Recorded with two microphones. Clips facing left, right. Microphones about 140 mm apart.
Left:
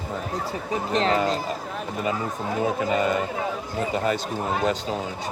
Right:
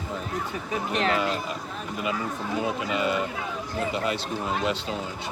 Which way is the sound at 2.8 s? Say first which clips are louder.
Left 3 dB; 40° left (ahead or behind).